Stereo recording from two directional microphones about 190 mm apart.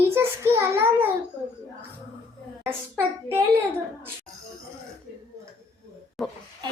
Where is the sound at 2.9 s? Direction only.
10° right (ahead or behind).